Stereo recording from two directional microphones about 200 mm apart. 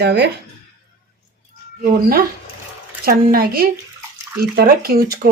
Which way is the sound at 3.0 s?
45° right (ahead or behind).